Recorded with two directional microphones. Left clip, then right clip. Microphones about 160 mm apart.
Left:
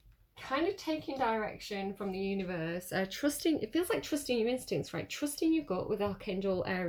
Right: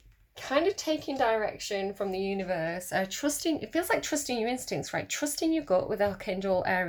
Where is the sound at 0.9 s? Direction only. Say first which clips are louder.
Right 6 dB; 55° right (ahead or behind).